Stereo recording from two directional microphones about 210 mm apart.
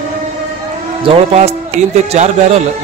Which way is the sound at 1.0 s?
30° right (ahead or behind).